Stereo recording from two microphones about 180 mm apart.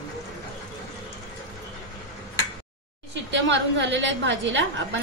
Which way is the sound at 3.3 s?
85° right.